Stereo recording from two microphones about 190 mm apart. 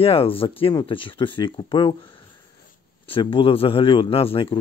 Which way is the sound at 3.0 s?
25° left (ahead or behind).